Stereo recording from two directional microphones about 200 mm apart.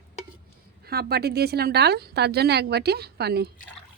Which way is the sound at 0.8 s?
50° right (ahead or behind).